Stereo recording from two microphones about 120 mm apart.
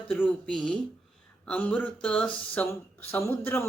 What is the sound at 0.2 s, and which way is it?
Speech, 5° left (ahead or behind).